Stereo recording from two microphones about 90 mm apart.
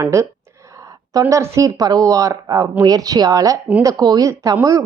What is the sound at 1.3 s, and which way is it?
A woman's voice, 35° right (ahead or behind).